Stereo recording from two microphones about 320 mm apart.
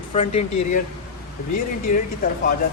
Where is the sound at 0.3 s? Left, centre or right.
Left.